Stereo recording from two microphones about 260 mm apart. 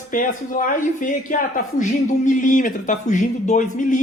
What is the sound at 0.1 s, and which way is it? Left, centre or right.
A man's voice, left.